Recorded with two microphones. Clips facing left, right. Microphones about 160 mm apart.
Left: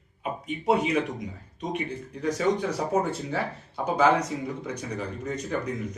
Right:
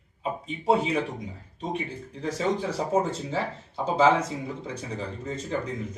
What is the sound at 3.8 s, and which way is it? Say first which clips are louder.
Speech: right 1 dB; 25° right (ahead or behind).